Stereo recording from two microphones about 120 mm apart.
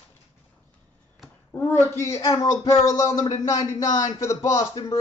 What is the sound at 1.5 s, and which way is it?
A woman's voice, 20° left (ahead or behind).